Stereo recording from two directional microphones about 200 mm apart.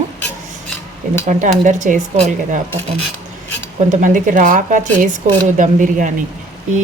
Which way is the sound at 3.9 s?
40° right (ahead or behind).